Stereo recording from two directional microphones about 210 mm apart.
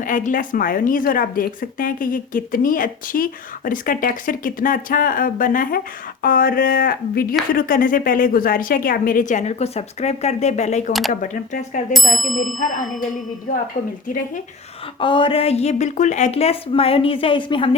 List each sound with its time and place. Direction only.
0.0 s a woman's voice: 40° left (ahead or behind)
11.9 s ding: centre (ahead or behind)
15.0 s speech: 25° left (ahead or behind)